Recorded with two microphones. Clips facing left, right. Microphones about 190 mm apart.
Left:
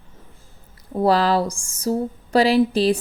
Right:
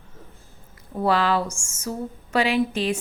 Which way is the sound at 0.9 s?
35° left (ahead or behind).